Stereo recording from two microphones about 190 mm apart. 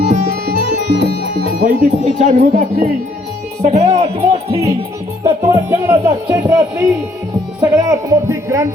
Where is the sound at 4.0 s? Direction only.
30° right (ahead or behind).